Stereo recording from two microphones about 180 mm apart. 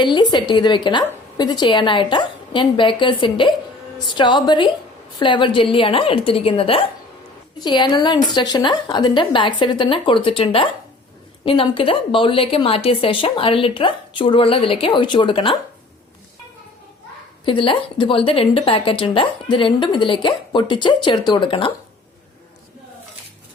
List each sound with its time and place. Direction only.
0.0 s a woman's voice: 25° left (ahead or behind)
17.4 s a woman's voice: 30° left (ahead or behind)